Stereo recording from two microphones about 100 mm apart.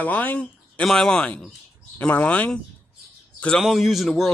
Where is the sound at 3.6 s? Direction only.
Centre (ahead or behind).